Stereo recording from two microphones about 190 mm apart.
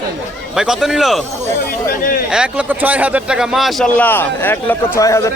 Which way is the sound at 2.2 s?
5° right (ahead or behind).